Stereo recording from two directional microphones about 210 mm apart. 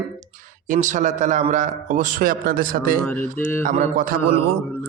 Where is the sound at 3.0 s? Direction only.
10° left (ahead or behind).